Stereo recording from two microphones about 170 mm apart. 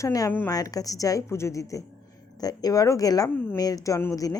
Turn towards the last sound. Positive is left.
turn(degrees=20)  # may be behind; listen again after turning